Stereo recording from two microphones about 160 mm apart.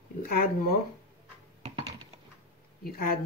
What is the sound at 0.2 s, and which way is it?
Speech, 65° left (ahead or behind).